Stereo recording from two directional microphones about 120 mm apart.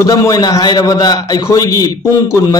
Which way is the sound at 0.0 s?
30° left (ahead or behind).